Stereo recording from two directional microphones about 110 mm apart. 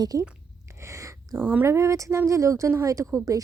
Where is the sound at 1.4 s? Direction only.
20° right (ahead or behind).